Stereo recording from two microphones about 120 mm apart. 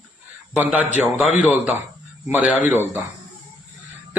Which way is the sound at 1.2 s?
Centre (ahead or behind).